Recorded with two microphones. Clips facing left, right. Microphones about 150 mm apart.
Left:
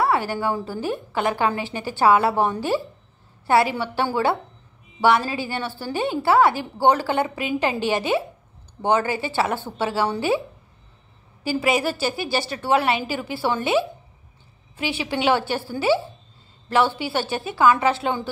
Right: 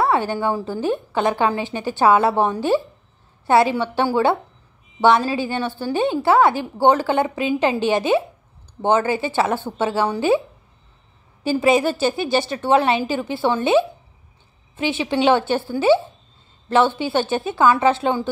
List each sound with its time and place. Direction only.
0.0 s a woman's voice: 20° right (ahead or behind)
11.4 s a woman's voice: 25° right (ahead or behind)